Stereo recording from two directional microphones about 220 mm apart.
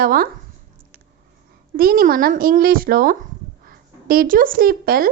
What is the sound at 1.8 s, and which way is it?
Speech, 40° right (ahead or behind).